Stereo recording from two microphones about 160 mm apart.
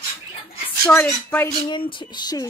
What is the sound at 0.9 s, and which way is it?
Speech, 10° left (ahead or behind).